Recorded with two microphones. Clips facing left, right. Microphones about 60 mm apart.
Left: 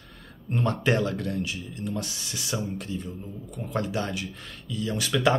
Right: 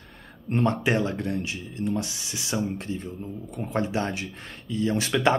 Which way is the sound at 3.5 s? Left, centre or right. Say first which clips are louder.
Right 2 dB; right.